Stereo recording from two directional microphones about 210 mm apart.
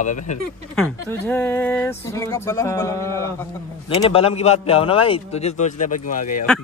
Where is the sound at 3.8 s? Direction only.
25° left (ahead or behind).